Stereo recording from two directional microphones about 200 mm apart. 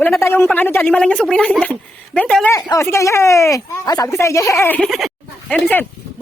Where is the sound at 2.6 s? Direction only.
15° left (ahead or behind).